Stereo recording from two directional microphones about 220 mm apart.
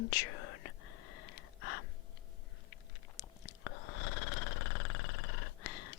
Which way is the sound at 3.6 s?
65° left (ahead or behind).